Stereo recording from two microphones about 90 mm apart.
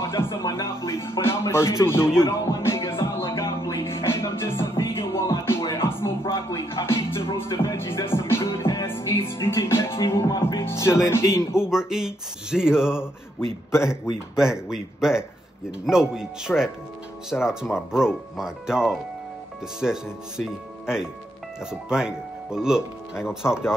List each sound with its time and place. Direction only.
0.0 s music: 30° left (ahead or behind)
0.8 s speech: 30° left (ahead or behind)
2.1 s music: 30° left (ahead or behind)
10.6 s speech: 30° left (ahead or behind)
11.5 s speech: 10° right (ahead or behind)
21.5 s speech: 10° right (ahead or behind)